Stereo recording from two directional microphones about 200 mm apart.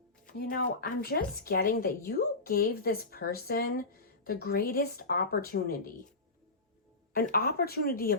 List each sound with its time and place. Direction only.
0.3 s speech: 45° left (ahead or behind)
7.1 s speech: 50° left (ahead or behind)